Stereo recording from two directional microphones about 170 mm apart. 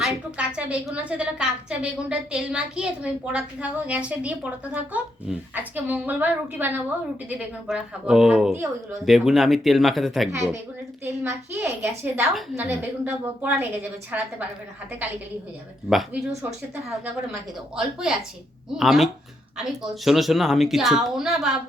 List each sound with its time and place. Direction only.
0.0 s a woman's voice: 5° right (ahead or behind)
8.5 s a woman's voice: 20° right (ahead or behind)
9.0 s speech: centre (ahead or behind)
11.0 s a woman's voice: 10° right (ahead or behind)
12.3 s speech: centre (ahead or behind)
12.6 s a woman's voice: 10° right (ahead or behind)
15.9 s speech: centre (ahead or behind)
17.7 s speech: 5° right (ahead or behind)